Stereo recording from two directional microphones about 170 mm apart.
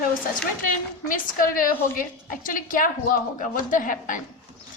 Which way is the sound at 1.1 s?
55° left (ahead or behind).